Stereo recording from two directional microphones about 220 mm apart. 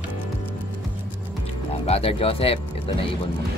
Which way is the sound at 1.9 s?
25° left (ahead or behind).